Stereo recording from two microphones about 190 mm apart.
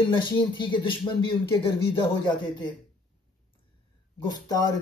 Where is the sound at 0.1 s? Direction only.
25° left (ahead or behind).